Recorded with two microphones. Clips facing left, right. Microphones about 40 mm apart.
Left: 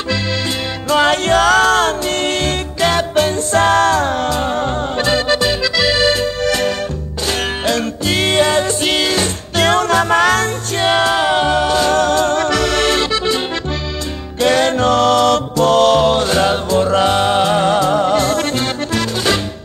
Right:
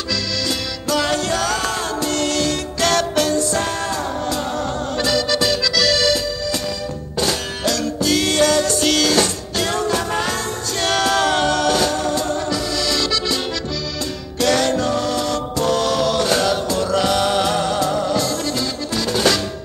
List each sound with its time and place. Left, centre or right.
0.8 s music: left
2.8 s music: centre
3.2 s music: left
4.3 s accordion: left
6.4 s accordion: left
7.2 s music: left
9.6 s music: left
10.8 s music: left
11.9 s music: left
14.4 s music: left
14.9 s music: left
17.6 s music: left